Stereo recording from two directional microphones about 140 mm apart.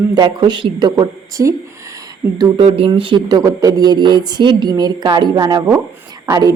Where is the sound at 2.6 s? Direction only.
40° right (ahead or behind).